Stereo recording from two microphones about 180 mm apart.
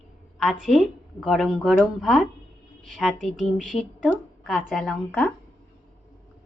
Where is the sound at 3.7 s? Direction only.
30° left (ahead or behind).